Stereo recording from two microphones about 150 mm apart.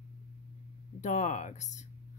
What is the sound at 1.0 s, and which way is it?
Speech, 50° left (ahead or behind).